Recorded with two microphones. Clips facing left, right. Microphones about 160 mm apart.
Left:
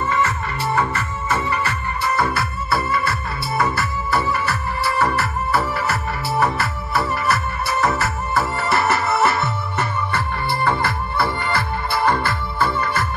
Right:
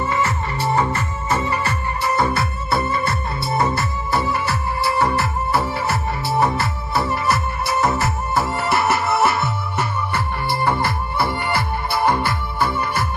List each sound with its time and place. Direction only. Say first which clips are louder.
0.1 s music: even; 20° right (ahead or behind)